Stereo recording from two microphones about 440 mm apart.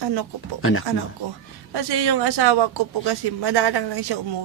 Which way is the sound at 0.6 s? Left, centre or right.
Left.